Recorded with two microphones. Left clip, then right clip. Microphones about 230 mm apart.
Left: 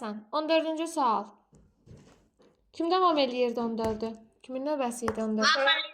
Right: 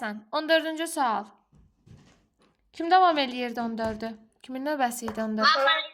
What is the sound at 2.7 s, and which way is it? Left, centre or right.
A woman's voice, right.